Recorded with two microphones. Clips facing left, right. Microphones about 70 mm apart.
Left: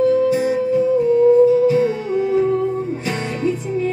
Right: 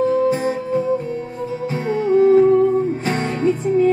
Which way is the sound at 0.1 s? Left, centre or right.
Right.